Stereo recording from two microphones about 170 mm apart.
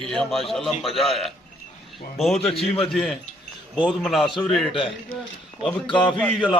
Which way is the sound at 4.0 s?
Centre (ahead or behind).